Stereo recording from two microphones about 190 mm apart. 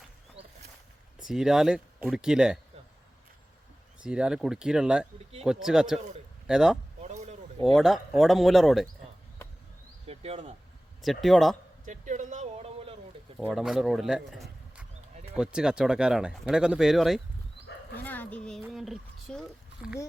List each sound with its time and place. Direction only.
1.3 s speech: centre (ahead or behind)
4.0 s speech: 5° right (ahead or behind)
7.0 s a sound: 40° right (ahead or behind)
7.6 s speech: centre (ahead or behind)
10.1 s speech: 30° right (ahead or behind)
11.0 s speech: centre (ahead or behind)
11.9 s a sound: 40° right (ahead or behind)
13.4 s speech: centre (ahead or behind)
17.9 s speech: 10° left (ahead or behind)